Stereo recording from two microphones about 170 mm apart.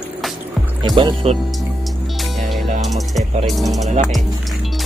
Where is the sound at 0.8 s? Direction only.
25° right (ahead or behind).